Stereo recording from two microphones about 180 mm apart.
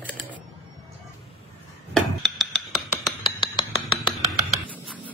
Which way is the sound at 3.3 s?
25° left (ahead or behind).